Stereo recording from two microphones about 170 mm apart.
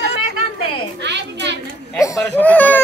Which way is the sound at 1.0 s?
90° right.